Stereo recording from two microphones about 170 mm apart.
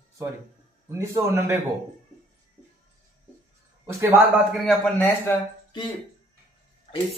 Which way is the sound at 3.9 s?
15° right (ahead or behind).